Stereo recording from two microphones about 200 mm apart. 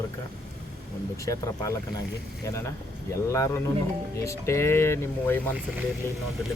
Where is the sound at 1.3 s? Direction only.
15° left (ahead or behind).